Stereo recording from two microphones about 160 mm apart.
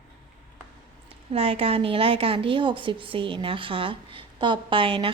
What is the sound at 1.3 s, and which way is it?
A woman's voice, 40° right (ahead or behind).